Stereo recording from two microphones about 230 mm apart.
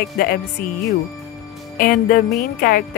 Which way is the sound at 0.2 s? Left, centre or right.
Left.